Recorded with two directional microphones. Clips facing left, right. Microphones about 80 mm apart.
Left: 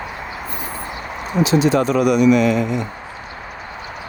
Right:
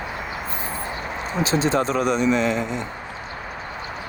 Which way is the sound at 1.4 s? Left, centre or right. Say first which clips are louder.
Left 5 dB; right.